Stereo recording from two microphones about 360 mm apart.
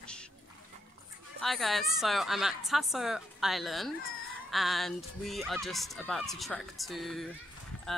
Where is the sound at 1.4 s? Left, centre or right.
Centre.